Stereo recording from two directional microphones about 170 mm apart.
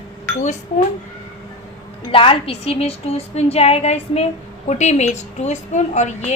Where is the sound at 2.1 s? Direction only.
30° left (ahead or behind).